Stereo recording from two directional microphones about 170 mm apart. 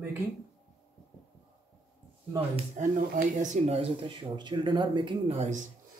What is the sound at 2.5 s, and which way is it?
Speech, 45° right (ahead or behind).